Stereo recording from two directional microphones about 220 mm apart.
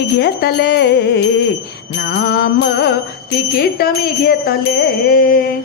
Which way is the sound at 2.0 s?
50° left (ahead or behind).